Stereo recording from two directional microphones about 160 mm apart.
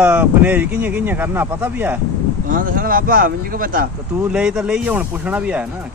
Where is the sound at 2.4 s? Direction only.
60° right (ahead or behind).